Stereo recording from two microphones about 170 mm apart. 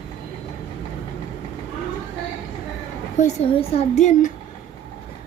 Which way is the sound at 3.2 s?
45° left (ahead or behind).